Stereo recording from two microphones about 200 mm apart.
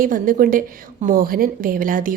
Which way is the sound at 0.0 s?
45° right (ahead or behind).